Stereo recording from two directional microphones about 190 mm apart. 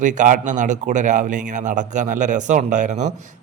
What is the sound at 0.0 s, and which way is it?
A man's voice, 40° right (ahead or behind).